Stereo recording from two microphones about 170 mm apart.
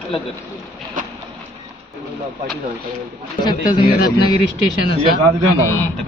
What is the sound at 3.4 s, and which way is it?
Speech, 25° left (ahead or behind).